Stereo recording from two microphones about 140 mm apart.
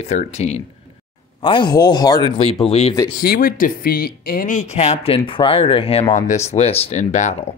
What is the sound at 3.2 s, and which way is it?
Speech, 90° left.